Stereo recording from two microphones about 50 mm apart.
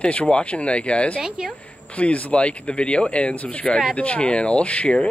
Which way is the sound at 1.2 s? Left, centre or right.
Centre.